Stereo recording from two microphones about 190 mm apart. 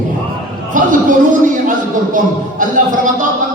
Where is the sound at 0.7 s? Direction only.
45° right (ahead or behind).